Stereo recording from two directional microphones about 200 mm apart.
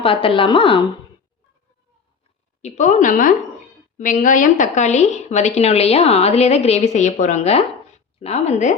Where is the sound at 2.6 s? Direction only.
40° left (ahead or behind).